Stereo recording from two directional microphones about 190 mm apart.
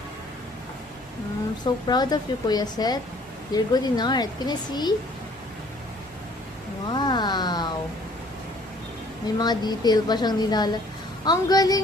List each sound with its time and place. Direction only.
1.6 s a woman's voice: 20° left (ahead or behind)
6.9 s a sound: 25° left (ahead or behind)
9.4 s a woman's voice: 20° left (ahead or behind)